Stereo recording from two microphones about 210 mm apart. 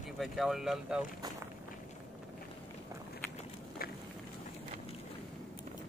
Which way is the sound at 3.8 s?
45° left (ahead or behind).